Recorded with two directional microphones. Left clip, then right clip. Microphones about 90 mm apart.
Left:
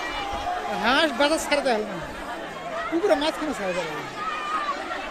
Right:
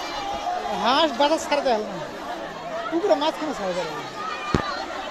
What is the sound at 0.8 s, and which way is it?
Speech, 40° left (ahead or behind).